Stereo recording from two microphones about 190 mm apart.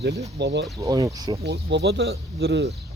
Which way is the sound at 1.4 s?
60° right (ahead or behind).